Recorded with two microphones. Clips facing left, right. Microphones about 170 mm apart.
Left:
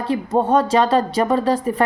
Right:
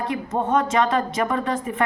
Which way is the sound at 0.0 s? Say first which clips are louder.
Left 5 dB; 30° left (ahead or behind).